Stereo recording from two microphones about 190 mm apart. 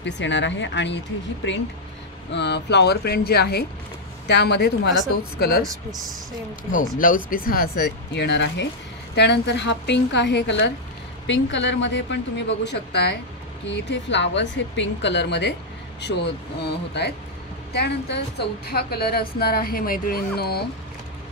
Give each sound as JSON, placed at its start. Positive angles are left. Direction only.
{"t": 0.0, "sound": "a woman's voice", "side_deg": 70}
{"t": 5.6, "sound": "speech", "side_deg": 0}
{"t": 7.0, "sound": "a woman's voice", "side_deg": 45}